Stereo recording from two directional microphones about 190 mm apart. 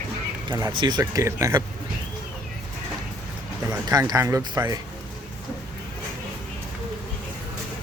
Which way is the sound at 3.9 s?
15° right (ahead or behind).